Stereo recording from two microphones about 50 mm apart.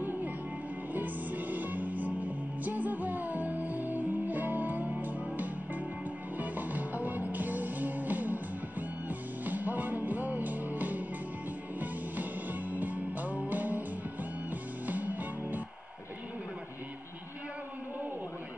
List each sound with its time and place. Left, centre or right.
0.9 s music: right